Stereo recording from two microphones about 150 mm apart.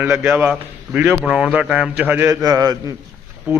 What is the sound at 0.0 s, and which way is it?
A man's voice, 10° right (ahead or behind).